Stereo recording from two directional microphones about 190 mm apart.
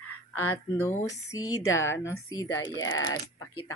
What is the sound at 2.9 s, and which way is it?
Speech, 90° left.